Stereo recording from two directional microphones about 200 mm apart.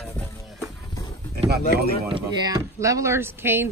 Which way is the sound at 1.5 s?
55° right (ahead or behind).